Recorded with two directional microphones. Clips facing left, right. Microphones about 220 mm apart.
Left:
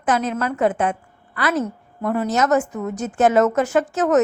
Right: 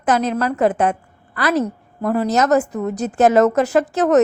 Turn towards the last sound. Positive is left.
turn(degrees=-35)  # may be behind; listen again after turning